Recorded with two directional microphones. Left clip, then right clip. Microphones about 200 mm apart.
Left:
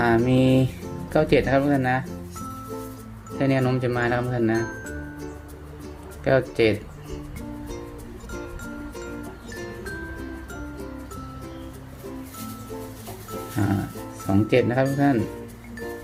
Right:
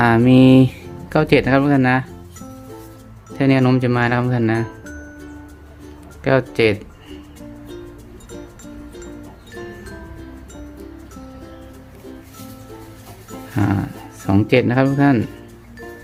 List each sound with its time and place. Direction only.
0.0 s music: 30° right (ahead or behind)
1.1 s speech: 30° right (ahead or behind)
3.3 s speech: 30° right (ahead or behind)
6.2 s speech: 30° right (ahead or behind)
14.3 s speech: 35° right (ahead or behind)